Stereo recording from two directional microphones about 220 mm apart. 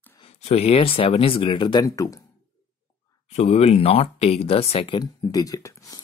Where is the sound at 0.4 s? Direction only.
30° left (ahead or behind).